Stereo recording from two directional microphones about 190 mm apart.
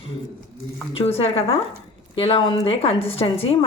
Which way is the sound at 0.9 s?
30° left (ahead or behind).